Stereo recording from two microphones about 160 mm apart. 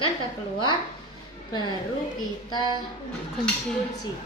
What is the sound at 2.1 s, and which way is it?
Speech, 25° left (ahead or behind).